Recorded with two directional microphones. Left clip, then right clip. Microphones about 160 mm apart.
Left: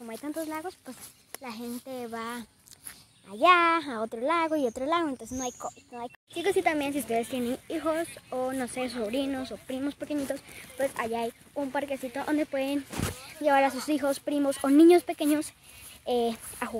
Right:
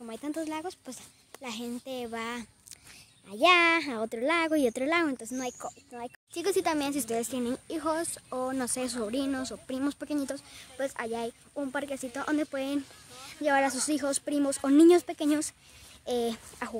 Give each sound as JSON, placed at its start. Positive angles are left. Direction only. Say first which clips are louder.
{"t": 0.0, "sound": "speech", "louder": "even", "side_deg": -20}
{"t": 8.6, "sound": "speech", "louder": "left 1 dB", "side_deg": -20}
{"t": 10.8, "sound": "speech", "louder": "left 3 dB", "side_deg": 0}